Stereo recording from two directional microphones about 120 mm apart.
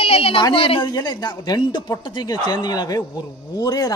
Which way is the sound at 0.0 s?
55° left (ahead or behind).